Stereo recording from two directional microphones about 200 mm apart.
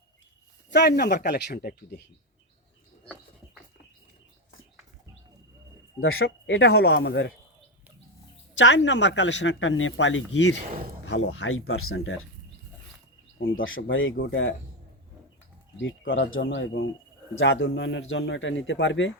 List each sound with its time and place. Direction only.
0.7 s speech: 55° left (ahead or behind)
6.1 s speech: 55° left (ahead or behind)
8.5 s speech: 65° left (ahead or behind)
10.7 s speech: 45° right (ahead or behind)
11.0 s speech: 75° left (ahead or behind)
13.6 s speech: 80° left
14.2 s a man's voice: 65° left (ahead or behind)
15.8 s a man's voice: 75° left (ahead or behind)